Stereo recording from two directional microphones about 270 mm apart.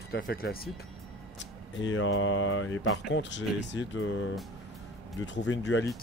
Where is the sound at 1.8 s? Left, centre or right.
Left.